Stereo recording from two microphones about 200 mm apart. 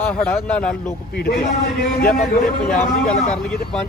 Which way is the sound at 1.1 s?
55° left (ahead or behind).